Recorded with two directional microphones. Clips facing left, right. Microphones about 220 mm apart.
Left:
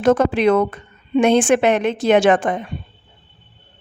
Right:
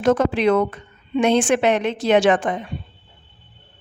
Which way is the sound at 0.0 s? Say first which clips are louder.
Left 2 dB; 55° left (ahead or behind).